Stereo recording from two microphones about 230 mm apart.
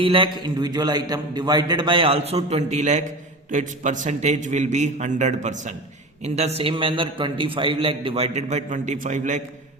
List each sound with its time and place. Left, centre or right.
0.0 s a man's voice: right